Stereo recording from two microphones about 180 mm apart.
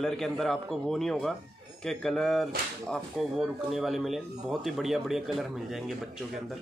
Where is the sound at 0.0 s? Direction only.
Centre (ahead or behind).